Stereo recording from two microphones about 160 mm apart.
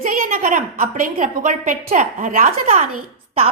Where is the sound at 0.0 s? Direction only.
55° right (ahead or behind).